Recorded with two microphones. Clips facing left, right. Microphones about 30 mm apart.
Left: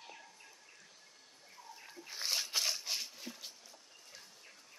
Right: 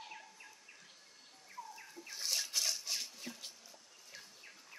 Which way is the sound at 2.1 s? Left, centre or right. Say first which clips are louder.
Left 2 dB; left.